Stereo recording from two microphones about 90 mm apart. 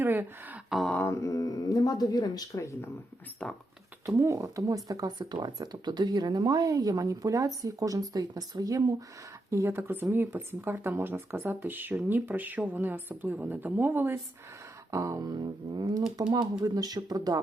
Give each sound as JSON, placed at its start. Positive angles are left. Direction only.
{"t": 0.0, "sound": "a sound", "side_deg": -20}
{"t": 0.7, "sound": "mantra", "side_deg": 0}
{"t": 1.0, "sound": "speech", "side_deg": 35}
{"t": 3.4, "sound": "speech", "side_deg": 10}
{"t": 4.0, "sound": "speech", "side_deg": -35}
{"t": 9.5, "sound": "speech", "side_deg": -30}
{"t": 14.8, "sound": "beatboxing", "side_deg": -35}
{"t": 15.3, "sound": "speech", "side_deg": -55}